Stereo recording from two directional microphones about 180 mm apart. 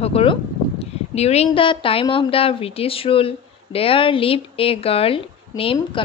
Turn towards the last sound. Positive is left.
turn(degrees=30)  # may be behind; listen again after turning